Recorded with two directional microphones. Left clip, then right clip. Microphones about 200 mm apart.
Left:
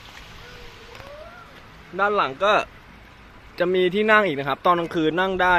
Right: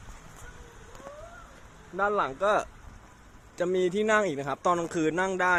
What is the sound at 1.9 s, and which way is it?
Speech, 5° left (ahead or behind).